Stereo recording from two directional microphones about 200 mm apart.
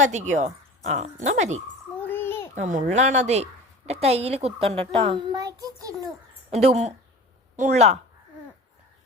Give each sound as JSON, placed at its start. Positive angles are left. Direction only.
{"t": 0.0, "sound": "a woman's voice", "side_deg": -35}
{"t": 2.0, "sound": "a sound", "side_deg": 10}
{"t": 2.6, "sound": "a woman's voice", "side_deg": -40}
{"t": 6.5, "sound": "a woman's voice", "side_deg": -35}